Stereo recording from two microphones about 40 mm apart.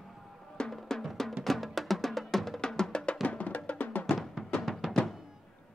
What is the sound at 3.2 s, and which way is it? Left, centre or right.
Music, left.